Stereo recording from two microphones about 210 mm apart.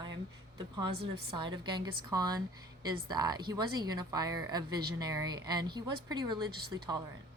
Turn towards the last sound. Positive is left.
turn(degrees=-20)  # may be behind; listen again after turning